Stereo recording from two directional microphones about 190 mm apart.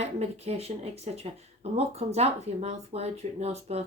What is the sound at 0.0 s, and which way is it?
Speech, 35° right (ahead or behind).